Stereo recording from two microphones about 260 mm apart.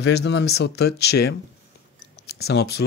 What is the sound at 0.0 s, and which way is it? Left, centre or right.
Speech, left.